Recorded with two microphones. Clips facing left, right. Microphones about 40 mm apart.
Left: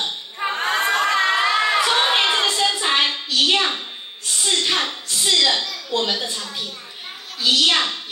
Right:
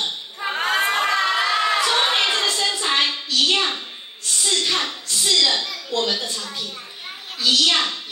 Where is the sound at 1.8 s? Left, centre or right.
Centre.